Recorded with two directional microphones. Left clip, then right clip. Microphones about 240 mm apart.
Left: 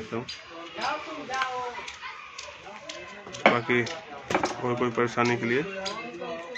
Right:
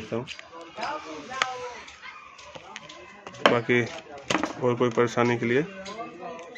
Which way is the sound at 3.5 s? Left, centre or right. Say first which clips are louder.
Right 2 dB; right.